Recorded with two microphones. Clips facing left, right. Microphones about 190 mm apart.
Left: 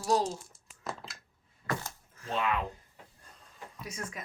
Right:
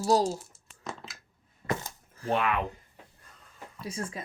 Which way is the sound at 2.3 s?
60° right (ahead or behind).